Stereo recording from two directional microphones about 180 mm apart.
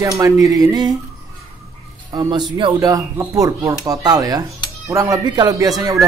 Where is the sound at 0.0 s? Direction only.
20° right (ahead or behind).